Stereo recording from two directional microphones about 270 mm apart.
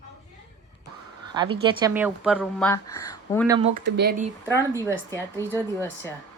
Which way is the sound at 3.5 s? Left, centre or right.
Centre.